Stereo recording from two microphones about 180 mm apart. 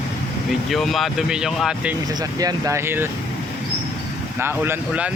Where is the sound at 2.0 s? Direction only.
20° right (ahead or behind).